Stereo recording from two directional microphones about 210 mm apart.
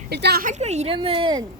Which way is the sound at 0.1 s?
50° right (ahead or behind).